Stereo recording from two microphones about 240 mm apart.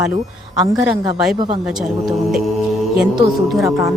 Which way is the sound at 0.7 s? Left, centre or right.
Centre.